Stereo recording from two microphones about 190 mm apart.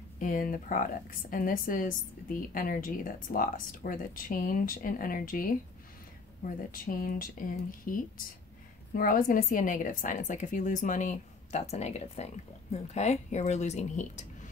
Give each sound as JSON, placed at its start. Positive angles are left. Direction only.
{"t": 0.2, "sound": "a woman's voice", "side_deg": 45}